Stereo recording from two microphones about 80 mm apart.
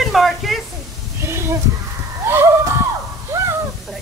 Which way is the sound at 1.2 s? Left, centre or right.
Right.